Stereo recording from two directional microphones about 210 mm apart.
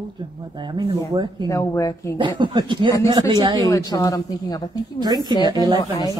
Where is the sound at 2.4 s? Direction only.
20° right (ahead or behind).